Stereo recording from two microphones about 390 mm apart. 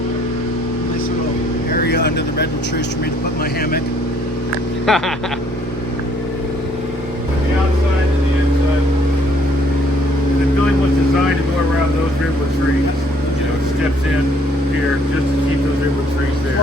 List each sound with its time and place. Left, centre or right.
1.9 s speech: left
4.9 s speech: centre